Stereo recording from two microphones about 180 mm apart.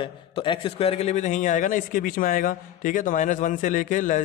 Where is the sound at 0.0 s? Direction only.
30° left (ahead or behind).